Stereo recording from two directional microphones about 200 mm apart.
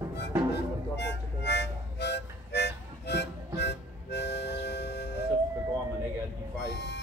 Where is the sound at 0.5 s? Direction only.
60° left (ahead or behind).